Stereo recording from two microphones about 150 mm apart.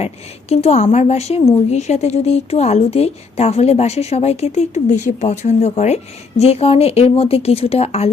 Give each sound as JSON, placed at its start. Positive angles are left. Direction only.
{"t": 0.0, "sound": "a woman's voice", "side_deg": 45}